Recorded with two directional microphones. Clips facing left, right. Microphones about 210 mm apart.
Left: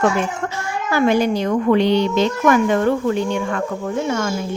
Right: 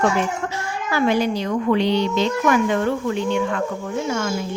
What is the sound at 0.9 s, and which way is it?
A woman's voice, 45° left (ahead or behind).